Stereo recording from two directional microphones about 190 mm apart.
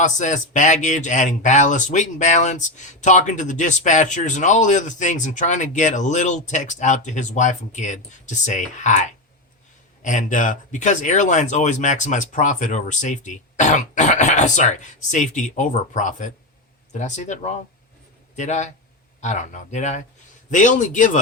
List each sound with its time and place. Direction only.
0.0 s speech: 40° left (ahead or behind)